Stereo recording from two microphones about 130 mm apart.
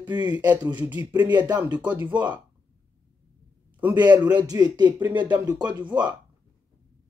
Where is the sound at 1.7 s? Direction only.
35° right (ahead or behind).